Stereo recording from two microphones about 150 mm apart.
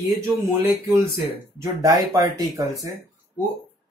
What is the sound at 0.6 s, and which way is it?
Speech, 20° right (ahead or behind).